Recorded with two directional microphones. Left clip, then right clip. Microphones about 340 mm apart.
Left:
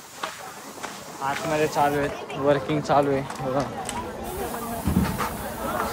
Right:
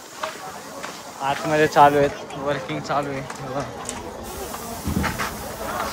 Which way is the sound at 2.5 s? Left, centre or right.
Centre.